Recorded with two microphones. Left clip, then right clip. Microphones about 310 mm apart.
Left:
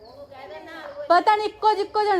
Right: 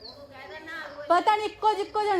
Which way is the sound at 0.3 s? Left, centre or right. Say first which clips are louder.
Even; left.